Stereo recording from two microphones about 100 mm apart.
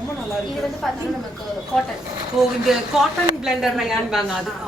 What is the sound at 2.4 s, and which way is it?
A woman's voice, centre (ahead or behind).